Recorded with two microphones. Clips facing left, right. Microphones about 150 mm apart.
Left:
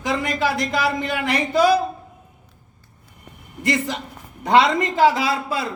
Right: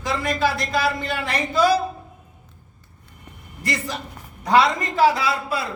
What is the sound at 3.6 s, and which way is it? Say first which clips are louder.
A man's voice: left 5 dB; 20° left (ahead or behind).